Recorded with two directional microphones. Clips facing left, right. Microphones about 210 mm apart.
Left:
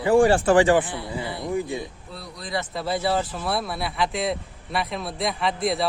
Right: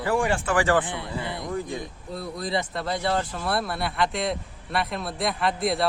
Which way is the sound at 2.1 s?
45° right (ahead or behind).